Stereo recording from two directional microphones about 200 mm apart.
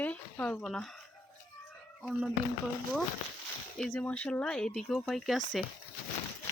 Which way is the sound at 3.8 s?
10° left (ahead or behind).